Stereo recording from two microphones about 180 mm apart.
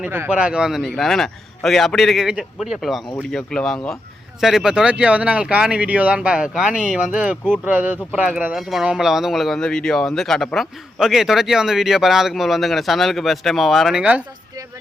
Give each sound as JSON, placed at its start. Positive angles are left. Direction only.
{"t": 0.0, "sound": "speech", "side_deg": -10}